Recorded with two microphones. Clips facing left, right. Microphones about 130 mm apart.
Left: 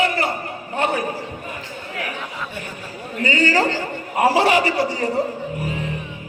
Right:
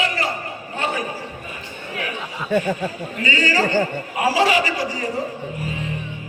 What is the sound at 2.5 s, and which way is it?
Speech, 85° right.